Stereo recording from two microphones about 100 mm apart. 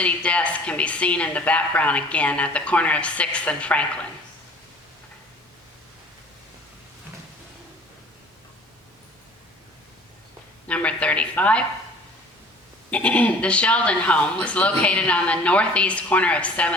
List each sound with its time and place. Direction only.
0.0 s a woman's voice: 10° left (ahead or behind)
10.7 s a woman's voice: 10° left (ahead or behind)
12.9 s a woman's voice: 15° left (ahead or behind)